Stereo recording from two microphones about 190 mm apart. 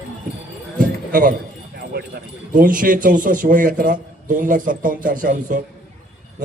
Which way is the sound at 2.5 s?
45° right (ahead or behind).